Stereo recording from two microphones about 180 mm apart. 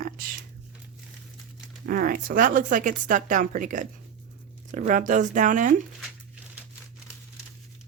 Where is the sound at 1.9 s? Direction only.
50° right (ahead or behind).